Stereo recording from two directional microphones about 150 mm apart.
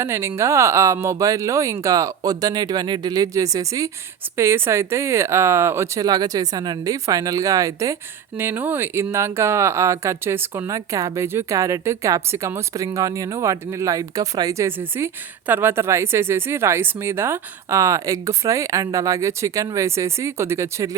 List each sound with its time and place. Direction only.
0.0 s speech: 15° right (ahead or behind)